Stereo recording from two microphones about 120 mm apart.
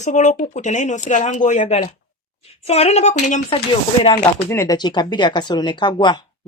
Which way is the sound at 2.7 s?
60° left (ahead or behind).